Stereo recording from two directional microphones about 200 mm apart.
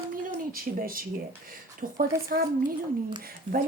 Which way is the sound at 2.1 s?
15° right (ahead or behind).